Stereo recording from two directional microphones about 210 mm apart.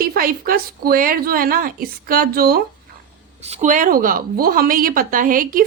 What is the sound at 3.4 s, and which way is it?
A woman's voice, 30° right (ahead or behind).